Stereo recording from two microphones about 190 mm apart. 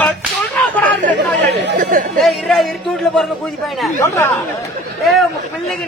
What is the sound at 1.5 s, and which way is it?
Speech, 65° right (ahead or behind).